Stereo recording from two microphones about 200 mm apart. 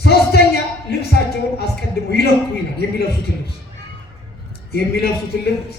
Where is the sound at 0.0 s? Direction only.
55° left (ahead or behind).